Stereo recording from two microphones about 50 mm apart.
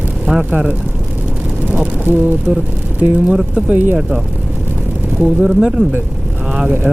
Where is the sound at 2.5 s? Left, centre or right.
Right.